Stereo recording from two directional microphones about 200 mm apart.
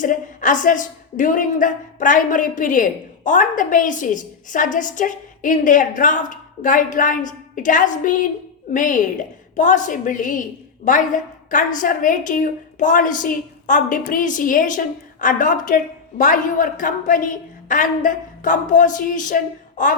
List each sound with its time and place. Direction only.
0.0 s a woman's voice: 40° left (ahead or behind)